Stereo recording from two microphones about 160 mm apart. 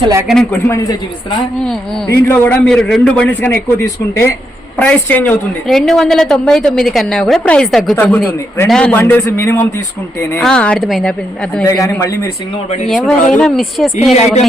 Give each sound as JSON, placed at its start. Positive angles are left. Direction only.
{"t": 0.0, "sound": "a man's voice", "side_deg": -20}
{"t": 0.5, "sound": "a man's voice", "side_deg": 15}
{"t": 2.1, "sound": "a man's voice", "side_deg": 15}
{"t": 11.6, "sound": "a man's voice", "side_deg": 20}
{"t": 13.3, "sound": "a woman's voice", "side_deg": 0}
{"t": 14.1, "sound": "speech", "side_deg": 40}